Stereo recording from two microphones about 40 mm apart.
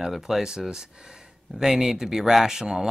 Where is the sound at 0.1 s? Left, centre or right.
Centre.